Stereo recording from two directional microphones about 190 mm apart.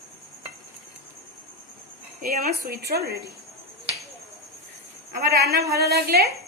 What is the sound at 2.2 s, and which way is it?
Speech, 50° right (ahead or behind).